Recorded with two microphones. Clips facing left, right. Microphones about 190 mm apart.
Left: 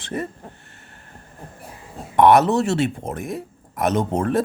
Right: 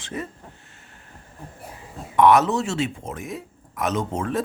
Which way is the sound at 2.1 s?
60° left (ahead or behind).